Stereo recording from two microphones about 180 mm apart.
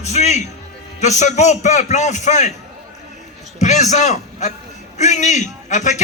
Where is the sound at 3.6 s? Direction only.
40° left (ahead or behind).